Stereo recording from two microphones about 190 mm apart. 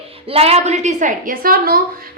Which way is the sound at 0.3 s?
30° right (ahead or behind).